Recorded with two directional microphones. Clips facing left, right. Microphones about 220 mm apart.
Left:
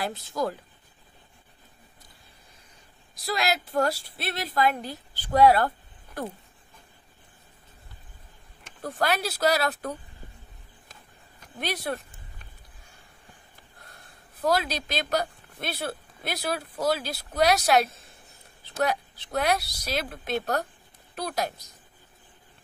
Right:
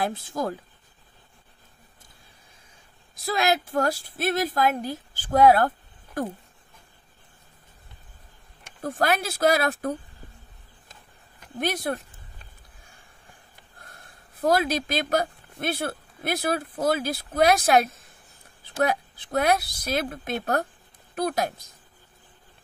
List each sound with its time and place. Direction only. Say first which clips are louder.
0.0 s speech: right 1 dB; 50° right (ahead or behind)
3.3 s speech: right 4 dB; 50° right (ahead or behind)
8.8 s speech: right 2 dB; 50° right (ahead or behind)
11.6 s speech: right 4 dB; 45° right (ahead or behind)
14.4 s speech: right 3 dB; 50° right (ahead or behind)
18.9 s speech: right 2 dB; 50° right (ahead or behind)